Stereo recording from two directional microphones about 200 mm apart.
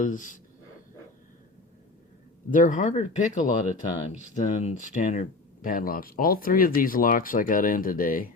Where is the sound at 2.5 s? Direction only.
40° left (ahead or behind).